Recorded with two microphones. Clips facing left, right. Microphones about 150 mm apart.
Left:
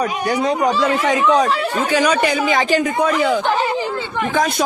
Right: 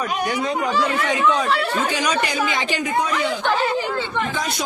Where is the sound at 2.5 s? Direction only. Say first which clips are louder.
Left 6 dB; 45° left (ahead or behind).